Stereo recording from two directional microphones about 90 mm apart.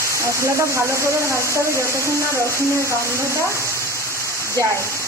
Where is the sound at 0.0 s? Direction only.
35° right (ahead or behind).